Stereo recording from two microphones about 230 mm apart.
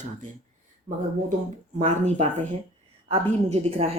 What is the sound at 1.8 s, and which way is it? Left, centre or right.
Speech, right.